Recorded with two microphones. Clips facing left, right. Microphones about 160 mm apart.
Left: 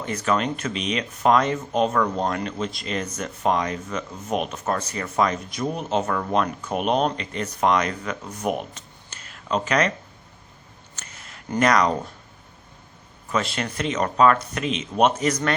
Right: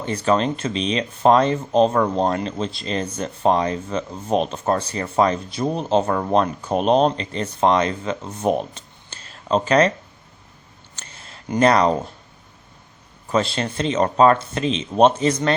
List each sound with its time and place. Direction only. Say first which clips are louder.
0.0 s speech: right 4 dB; 30° right (ahead or behind)
10.9 s a sound: right 2 dB; 30° right (ahead or behind)
13.2 s speech: right 4 dB; 30° right (ahead or behind)